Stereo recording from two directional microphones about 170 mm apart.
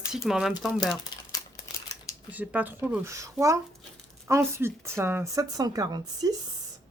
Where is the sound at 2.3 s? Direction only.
10° right (ahead or behind).